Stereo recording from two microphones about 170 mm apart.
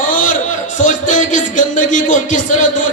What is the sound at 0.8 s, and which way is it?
Speech, 45° left (ahead or behind).